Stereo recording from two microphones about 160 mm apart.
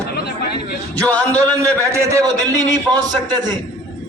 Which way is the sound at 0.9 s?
10° left (ahead or behind).